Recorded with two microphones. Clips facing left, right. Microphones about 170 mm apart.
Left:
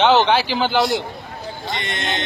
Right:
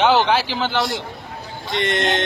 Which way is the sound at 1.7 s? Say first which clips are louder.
Right 10 dB; 85° right.